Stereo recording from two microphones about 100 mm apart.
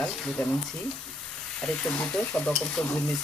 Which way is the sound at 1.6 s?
10° left (ahead or behind).